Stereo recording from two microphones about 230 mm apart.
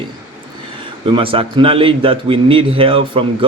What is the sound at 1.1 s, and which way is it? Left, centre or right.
A man's voice, right.